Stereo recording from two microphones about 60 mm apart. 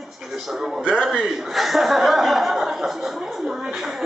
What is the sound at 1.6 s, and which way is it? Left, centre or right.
Chuckle, centre.